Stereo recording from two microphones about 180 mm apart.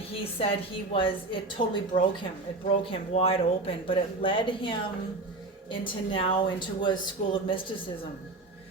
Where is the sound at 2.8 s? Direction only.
30° left (ahead or behind).